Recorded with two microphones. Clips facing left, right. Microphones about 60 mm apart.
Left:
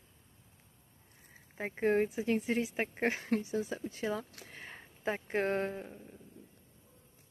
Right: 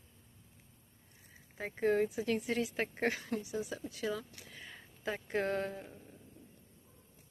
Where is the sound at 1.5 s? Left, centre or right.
Left.